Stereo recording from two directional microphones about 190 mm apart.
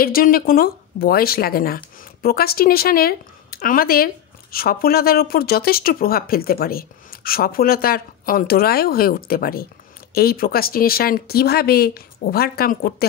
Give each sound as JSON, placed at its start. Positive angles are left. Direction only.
{"t": 0.0, "sound": "speech", "side_deg": 50}